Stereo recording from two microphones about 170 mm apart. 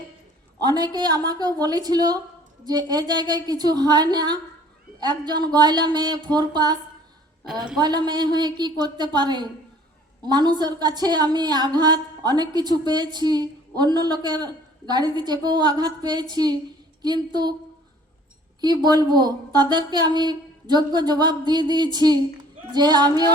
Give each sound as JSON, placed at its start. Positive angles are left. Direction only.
{"t": 0.6, "sound": "a woman's voice", "side_deg": -25}
{"t": 7.8, "sound": "a woman's voice", "side_deg": -25}
{"t": 18.6, "sound": "a woman's voice", "side_deg": -25}